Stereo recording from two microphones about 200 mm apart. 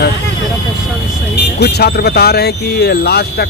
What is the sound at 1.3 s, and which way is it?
Speech, 55° left (ahead or behind).